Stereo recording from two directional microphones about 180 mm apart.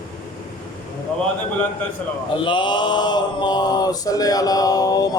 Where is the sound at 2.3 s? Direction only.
25° left (ahead or behind).